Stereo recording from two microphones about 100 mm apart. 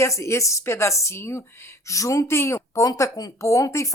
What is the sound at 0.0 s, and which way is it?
Speech, 30° left (ahead or behind).